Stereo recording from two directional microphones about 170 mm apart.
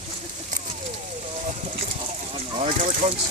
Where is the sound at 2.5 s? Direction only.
35° right (ahead or behind).